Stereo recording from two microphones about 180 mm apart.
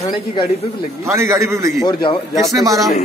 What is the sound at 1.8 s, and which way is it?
Speech, 25° left (ahead or behind).